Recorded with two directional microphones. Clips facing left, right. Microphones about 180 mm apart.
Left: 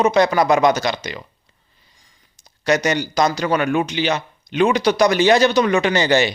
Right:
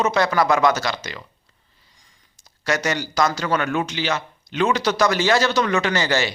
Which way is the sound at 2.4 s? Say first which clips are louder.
Left 5 dB; 20° left (ahead or behind).